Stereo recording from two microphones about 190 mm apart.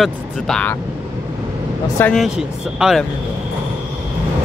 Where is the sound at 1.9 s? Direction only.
10° left (ahead or behind).